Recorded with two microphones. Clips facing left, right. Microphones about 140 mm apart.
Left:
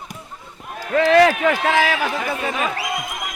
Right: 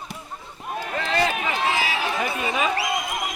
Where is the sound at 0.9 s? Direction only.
80° left.